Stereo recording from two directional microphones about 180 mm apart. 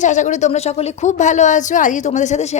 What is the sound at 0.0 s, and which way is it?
A woman's voice, 40° left (ahead or behind).